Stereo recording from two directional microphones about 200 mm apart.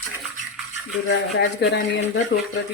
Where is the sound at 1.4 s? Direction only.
60° left (ahead or behind).